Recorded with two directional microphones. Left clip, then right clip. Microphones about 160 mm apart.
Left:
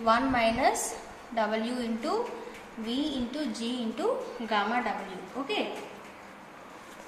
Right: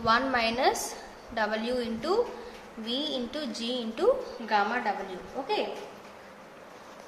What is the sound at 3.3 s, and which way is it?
Speech, 50° right (ahead or behind).